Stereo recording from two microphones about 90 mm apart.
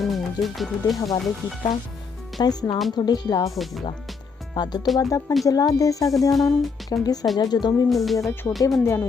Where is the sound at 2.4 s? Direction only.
50° left (ahead or behind).